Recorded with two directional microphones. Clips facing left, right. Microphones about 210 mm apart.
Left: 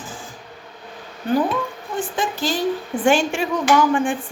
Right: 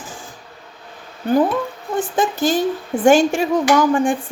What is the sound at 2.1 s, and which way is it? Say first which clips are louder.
A woman's voice: right 6 dB; 50° right (ahead or behind).